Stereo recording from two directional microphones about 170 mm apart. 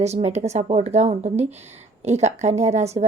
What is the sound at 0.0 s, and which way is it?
A woman's voice, 40° right (ahead or behind).